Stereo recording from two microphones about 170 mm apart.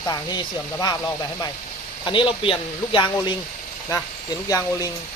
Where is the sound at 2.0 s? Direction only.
30° left (ahead or behind).